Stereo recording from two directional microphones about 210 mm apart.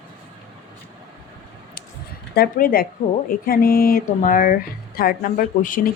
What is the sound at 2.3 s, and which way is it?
Speech, 45° left (ahead or behind).